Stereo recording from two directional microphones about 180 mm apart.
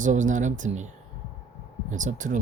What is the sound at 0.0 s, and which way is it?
Speech, 45° right (ahead or behind).